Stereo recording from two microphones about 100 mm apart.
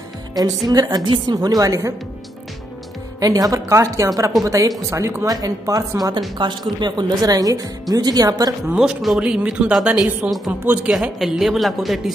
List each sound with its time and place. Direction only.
0.3 s a woman's voice: 40° right (ahead or behind)
3.2 s a woman's voice: 40° right (ahead or behind)
6.3 s a woman's voice: 50° right (ahead or behind)
8.7 s speech: 5° right (ahead or behind)
10.6 s speech: 15° right (ahead or behind)
10.9 s a woman's voice: 5° right (ahead or behind)